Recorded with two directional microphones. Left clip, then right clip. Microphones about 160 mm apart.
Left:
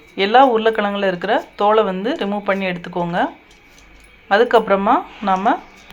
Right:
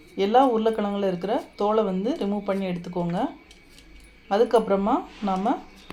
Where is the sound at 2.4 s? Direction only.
5° left (ahead or behind).